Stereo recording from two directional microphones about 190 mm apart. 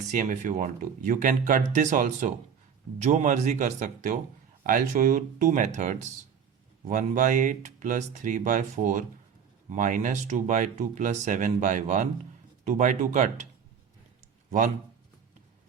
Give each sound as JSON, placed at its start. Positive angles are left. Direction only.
{"t": 0.0, "sound": "speech", "side_deg": -40}